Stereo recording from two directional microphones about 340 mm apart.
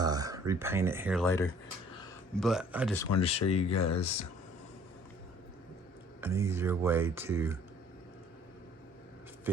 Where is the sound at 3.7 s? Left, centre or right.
Left.